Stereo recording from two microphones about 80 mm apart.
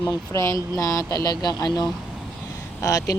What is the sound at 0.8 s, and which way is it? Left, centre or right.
Speech, left.